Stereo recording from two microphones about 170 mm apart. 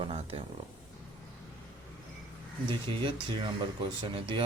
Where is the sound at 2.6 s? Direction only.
25° right (ahead or behind).